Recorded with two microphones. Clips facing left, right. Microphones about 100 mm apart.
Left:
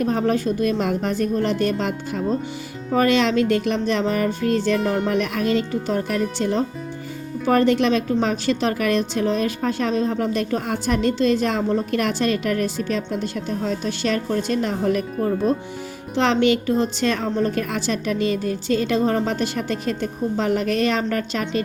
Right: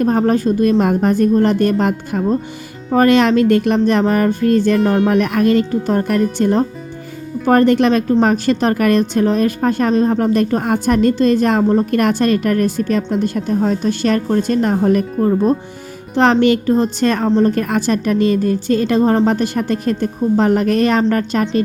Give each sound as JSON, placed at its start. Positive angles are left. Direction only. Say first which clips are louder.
{"t": 0.0, "sound": "a woman's voice", "louder": "right 6 dB", "side_deg": -45}
{"t": 16.1, "sound": "a woman's voice", "louder": "right 6 dB", "side_deg": -45}
{"t": 17.2, "sound": "a woman's voice", "louder": "right 8 dB", "side_deg": -30}
{"t": 17.5, "sound": "a woman's voice", "louder": "right 7 dB", "side_deg": -50}